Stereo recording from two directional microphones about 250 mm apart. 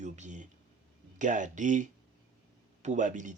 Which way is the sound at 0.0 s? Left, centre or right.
Right.